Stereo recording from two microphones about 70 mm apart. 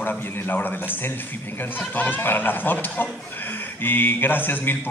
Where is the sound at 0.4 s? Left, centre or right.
Left.